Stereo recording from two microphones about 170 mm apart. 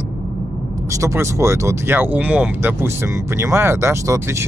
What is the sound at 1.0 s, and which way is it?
Speech, 15° right (ahead or behind).